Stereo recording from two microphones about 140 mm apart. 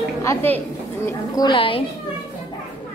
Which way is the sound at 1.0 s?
30° left (ahead or behind).